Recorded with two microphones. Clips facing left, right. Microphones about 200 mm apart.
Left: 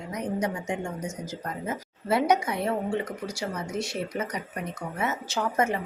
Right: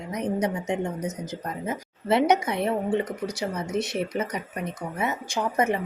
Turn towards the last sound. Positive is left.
turn(degrees=-15)  # may be behind; listen again after turning